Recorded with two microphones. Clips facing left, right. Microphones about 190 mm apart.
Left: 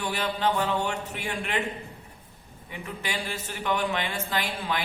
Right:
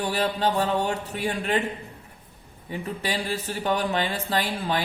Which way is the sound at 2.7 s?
35° right (ahead or behind).